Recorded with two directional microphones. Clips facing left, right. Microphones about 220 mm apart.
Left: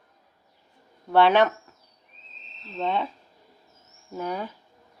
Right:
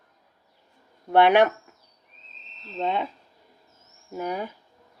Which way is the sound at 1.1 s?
15° right (ahead or behind).